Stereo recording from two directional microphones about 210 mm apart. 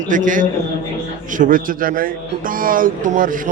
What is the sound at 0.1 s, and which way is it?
Speech, 40° right (ahead or behind).